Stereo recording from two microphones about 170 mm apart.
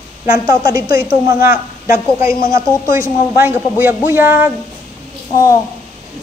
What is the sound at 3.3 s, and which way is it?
A woman's voice, 15° right (ahead or behind).